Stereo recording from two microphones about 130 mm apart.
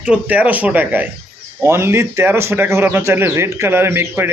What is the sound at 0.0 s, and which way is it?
Speech, 10° right (ahead or behind).